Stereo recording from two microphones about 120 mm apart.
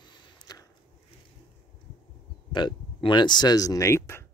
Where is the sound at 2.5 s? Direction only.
40° left (ahead or behind); by 4.2 s 20° left (ahead or behind).